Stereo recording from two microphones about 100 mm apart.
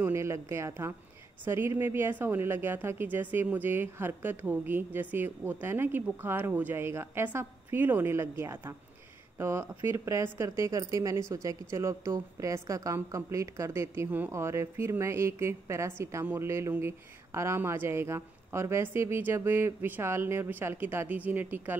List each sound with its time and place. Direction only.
0.0 s a woman's voice: 25° right (ahead or behind)